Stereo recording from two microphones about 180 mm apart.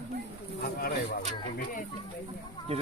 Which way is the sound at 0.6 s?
60° left (ahead or behind).